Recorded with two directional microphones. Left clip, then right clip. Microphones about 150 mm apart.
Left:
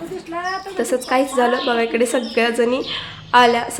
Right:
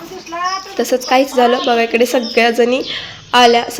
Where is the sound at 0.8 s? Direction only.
20° right (ahead or behind).